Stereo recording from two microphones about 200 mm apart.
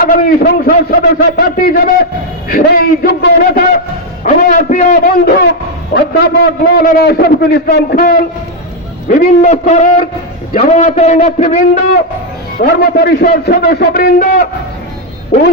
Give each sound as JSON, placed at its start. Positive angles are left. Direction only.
{"t": 0.1, "sound": "a man's voice", "side_deg": 50}
{"t": 4.2, "sound": "a man's voice", "side_deg": 40}
{"t": 12.6, "sound": "a man's voice", "side_deg": 50}